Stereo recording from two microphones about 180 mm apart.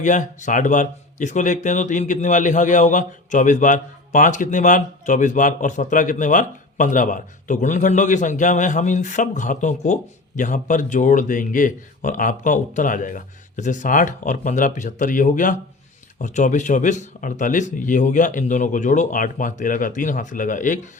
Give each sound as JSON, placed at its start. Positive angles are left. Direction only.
{"t": 0.0, "sound": "speech", "side_deg": 45}